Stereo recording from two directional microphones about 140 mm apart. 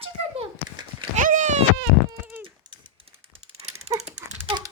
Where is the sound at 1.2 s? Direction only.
60° right (ahead or behind).